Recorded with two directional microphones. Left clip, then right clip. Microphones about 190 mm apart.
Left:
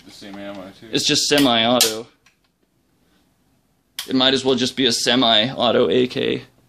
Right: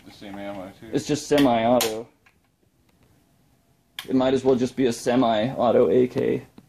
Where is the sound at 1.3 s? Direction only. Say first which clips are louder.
Left 1 dB; 25° left (ahead or behind).